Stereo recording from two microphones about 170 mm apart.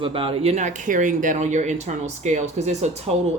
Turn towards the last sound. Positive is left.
turn(degrees=-40)  # may be behind; listen again after turning